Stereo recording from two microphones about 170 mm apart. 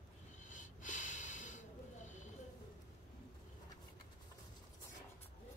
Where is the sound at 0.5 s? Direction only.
50° left (ahead or behind).